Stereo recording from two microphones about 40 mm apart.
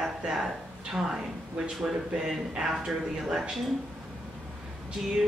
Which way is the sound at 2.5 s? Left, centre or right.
Centre.